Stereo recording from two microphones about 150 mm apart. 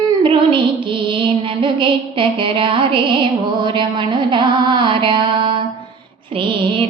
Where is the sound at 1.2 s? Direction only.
35° right (ahead or behind).